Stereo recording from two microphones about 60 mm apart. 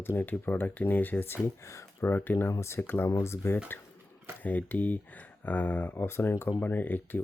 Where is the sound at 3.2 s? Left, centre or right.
Left.